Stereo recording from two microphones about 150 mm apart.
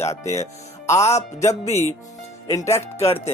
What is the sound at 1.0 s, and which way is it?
Speech, 45° left (ahead or behind).